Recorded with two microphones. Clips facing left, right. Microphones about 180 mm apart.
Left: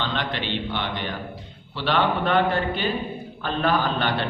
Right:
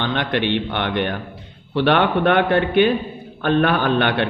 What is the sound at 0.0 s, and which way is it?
A man's voice, 55° right (ahead or behind).